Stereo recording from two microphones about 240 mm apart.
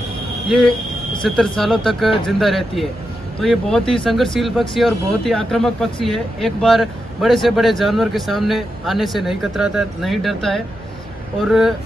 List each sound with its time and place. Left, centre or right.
0.5 s speech: centre